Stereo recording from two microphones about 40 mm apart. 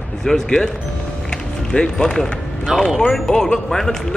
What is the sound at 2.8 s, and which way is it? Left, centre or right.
Speech, centre.